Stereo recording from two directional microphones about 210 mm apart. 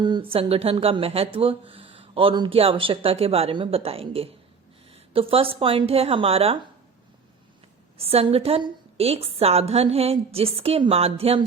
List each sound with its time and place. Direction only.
0.0 s speech: 20° right (ahead or behind)
7.9 s speech: 30° right (ahead or behind)